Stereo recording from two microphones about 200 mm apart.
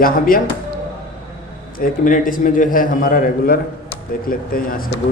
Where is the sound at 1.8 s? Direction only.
40° left (ahead or behind).